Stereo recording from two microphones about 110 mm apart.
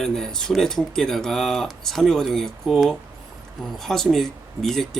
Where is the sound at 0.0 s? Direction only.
5° left (ahead or behind).